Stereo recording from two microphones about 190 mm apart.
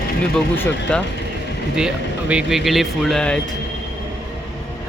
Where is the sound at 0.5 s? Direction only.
10° left (ahead or behind).